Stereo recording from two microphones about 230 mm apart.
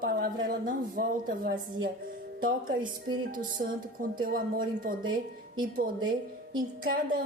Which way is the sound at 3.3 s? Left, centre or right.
Right.